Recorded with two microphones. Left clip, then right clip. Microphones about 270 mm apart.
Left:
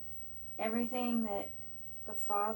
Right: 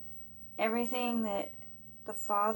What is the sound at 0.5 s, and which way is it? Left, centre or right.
Speech, right.